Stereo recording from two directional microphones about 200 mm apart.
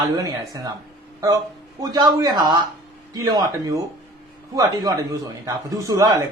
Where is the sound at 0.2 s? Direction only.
20° right (ahead or behind).